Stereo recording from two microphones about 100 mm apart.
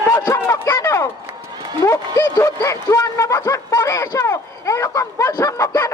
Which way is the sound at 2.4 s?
30° left (ahead or behind).